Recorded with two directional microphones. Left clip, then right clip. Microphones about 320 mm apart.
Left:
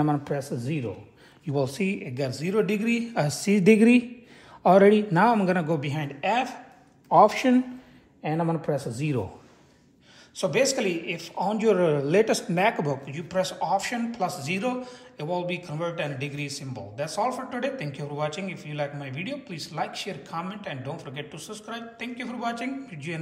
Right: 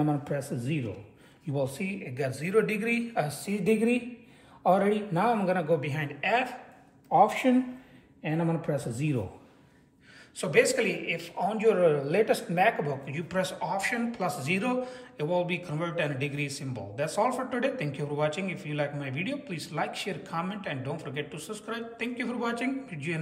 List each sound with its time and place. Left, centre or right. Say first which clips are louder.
0.0 s speech: left 3 dB; left
10.3 s speech: even; centre
13.0 s speech: left 3 dB; centre